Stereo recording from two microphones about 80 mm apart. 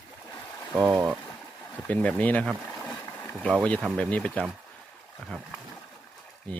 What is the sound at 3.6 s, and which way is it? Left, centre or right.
Speech, centre.